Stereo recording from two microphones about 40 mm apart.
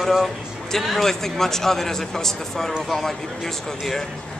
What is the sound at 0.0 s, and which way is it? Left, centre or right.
A man's voice, centre.